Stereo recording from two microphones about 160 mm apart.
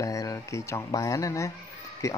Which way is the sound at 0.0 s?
20° left (ahead or behind).